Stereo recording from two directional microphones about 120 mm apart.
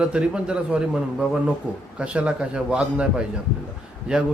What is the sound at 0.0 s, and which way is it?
Speech, 10° right (ahead or behind).